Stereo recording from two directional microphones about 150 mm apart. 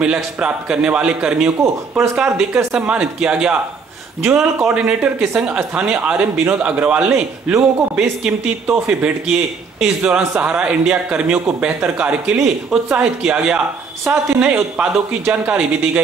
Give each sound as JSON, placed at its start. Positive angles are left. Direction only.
{"t": 0.0, "sound": "speech", "side_deg": -5}